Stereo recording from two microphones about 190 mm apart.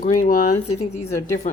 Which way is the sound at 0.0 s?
45° left (ahead or behind).